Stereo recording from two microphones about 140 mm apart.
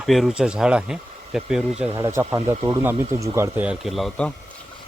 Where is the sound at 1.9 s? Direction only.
20° right (ahead or behind).